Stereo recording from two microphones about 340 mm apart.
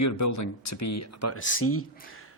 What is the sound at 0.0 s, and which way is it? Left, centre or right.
Speech, left.